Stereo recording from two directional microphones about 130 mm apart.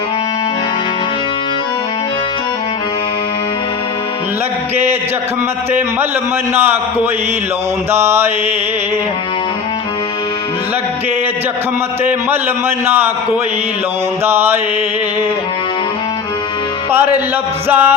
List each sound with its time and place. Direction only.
6.5 s a man's voice: 15° right (ahead or behind)
7.9 s mantra: 20° right (ahead or behind)
12.0 s a man's voice: 15° right (ahead or behind)
14.3 s a man's voice: 15° right (ahead or behind)
17.7 s a man's voice: 15° right (ahead or behind)